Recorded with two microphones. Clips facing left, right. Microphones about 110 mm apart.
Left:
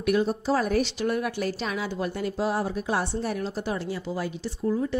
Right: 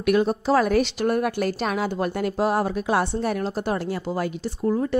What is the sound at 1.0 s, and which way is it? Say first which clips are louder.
A woman's voice: right 4 dB; 50° right (ahead or behind).